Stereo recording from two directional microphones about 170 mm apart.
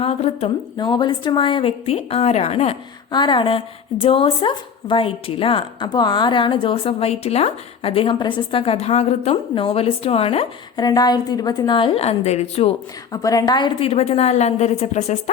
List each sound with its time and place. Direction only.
0.0 s a woman's voice: 35° left (ahead or behind)
13.2 s a woman's voice: 20° left (ahead or behind); by 15.2 s 40° left (ahead or behind)